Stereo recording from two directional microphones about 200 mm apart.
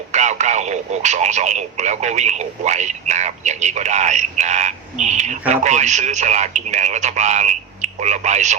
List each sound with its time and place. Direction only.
0.1 s speech: 35° right (ahead or behind)